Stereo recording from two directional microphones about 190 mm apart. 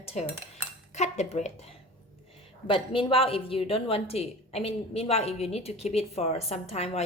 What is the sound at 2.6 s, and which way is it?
A woman's voice, 25° left (ahead or behind).